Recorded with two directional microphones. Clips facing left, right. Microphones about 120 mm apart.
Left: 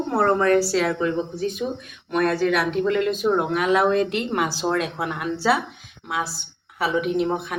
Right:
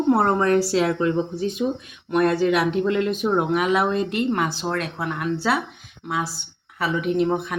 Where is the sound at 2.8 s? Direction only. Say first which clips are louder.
Left 1 dB; 15° right (ahead or behind).